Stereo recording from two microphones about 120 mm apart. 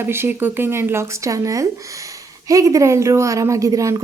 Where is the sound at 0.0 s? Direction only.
20° right (ahead or behind).